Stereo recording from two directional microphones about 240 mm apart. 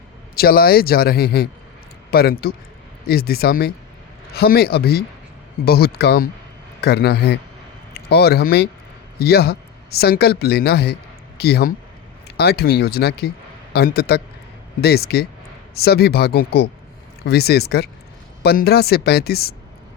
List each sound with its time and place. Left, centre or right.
0.3 s a man's voice: left